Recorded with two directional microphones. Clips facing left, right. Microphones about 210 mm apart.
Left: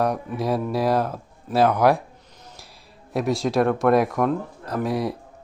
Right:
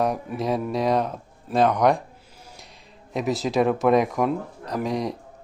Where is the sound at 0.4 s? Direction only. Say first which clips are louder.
Left 1 dB; centre (ahead or behind).